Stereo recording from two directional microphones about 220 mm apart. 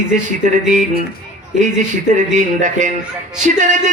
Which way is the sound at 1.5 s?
35° right (ahead or behind).